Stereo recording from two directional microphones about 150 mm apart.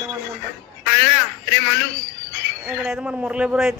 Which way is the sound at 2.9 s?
5° right (ahead or behind).